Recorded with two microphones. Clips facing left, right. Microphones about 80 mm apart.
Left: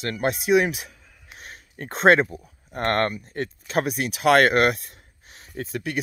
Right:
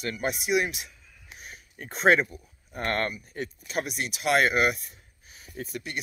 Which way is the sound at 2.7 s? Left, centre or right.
Left.